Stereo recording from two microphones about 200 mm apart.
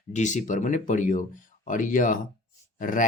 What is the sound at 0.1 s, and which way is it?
Speech, 35° left (ahead or behind).